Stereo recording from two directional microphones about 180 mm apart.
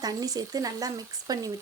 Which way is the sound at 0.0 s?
20° right (ahead or behind).